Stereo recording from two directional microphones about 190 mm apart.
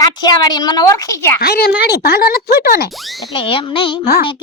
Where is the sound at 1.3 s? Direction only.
55° left (ahead or behind).